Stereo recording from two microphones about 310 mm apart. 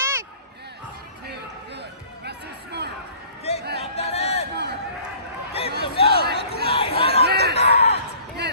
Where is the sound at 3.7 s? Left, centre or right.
Centre.